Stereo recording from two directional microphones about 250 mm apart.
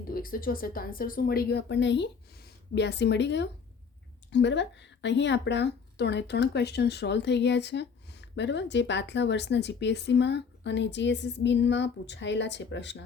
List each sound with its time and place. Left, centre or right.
0.1 s a woman's voice: left